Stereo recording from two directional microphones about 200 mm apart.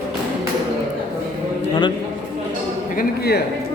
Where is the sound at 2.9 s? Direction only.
50° left (ahead or behind).